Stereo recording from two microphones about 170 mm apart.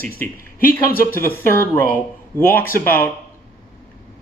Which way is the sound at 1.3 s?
15° left (ahead or behind).